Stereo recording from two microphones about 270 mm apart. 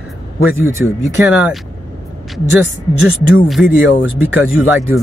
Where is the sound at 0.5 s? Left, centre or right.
Centre.